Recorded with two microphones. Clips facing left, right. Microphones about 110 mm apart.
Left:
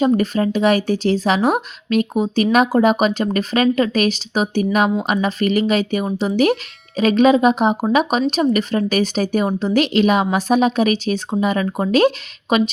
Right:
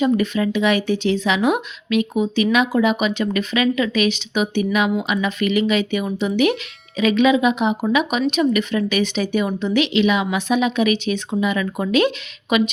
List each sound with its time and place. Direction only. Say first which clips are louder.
0.0 s speech: left 2 dB; 40° left (ahead or behind)